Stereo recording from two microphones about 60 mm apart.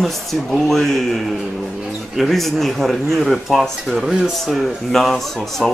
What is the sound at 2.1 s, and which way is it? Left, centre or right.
Speech, centre.